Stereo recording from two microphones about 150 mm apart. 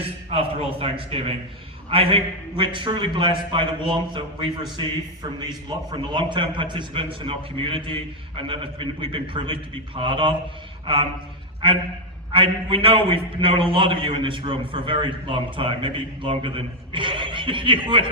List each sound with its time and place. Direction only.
0.0 s a man's voice: 40° right (ahead or behind)
12.3 s a man's voice: 35° right (ahead or behind)